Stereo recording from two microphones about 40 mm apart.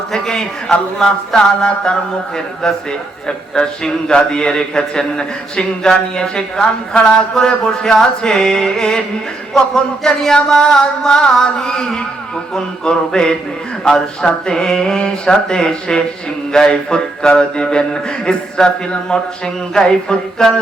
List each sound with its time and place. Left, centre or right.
0.1 s carnatic music: centre
0.9 s a man's voice: centre
3.2 s a man's voice: left
9.6 s carnatic music: centre
12.5 s a man's voice: centre
19.7 s a man's voice: centre